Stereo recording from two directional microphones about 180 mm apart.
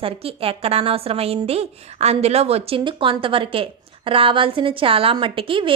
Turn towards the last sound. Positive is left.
turn(degrees=-30)  # may be behind; listen again after turning